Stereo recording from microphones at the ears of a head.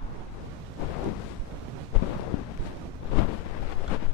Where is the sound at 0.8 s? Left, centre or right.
Left.